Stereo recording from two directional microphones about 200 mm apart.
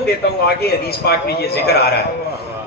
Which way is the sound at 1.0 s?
55° left (ahead or behind).